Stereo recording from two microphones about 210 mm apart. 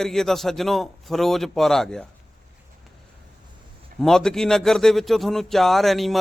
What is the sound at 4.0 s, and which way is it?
Speech, centre (ahead or behind).